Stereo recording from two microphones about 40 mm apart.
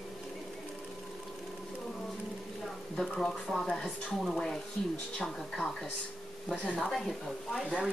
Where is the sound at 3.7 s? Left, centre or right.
Centre.